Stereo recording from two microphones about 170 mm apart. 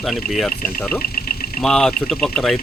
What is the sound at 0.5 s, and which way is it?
Speech, 60° left (ahead or behind).